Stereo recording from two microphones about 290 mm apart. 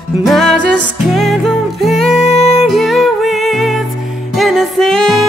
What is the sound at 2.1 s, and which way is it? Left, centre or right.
Music, left.